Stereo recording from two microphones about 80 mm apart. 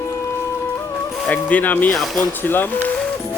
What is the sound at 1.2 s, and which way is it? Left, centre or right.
Speech, centre.